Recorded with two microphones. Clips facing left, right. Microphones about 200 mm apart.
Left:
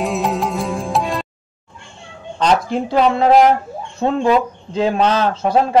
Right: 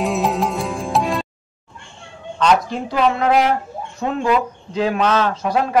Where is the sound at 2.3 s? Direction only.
35° left (ahead or behind).